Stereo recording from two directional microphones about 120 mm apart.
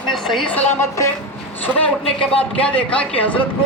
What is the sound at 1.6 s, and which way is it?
Speech, 5° left (ahead or behind).